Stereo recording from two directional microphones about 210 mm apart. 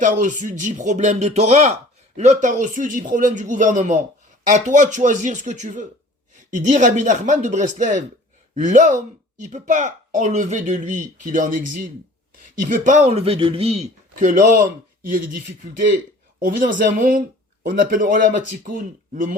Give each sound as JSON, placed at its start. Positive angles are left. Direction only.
{"t": 0.0, "sound": "speech", "side_deg": -35}
{"t": 16.4, "sound": "speech", "side_deg": -40}